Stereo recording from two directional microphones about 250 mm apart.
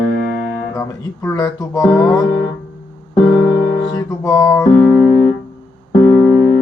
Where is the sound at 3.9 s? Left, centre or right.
Centre.